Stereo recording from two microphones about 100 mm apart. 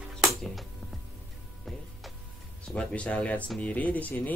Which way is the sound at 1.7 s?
Centre (ahead or behind).